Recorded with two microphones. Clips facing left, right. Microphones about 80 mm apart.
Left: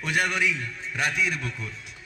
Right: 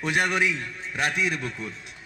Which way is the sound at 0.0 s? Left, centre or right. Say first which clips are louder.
Right 1 dB; centre.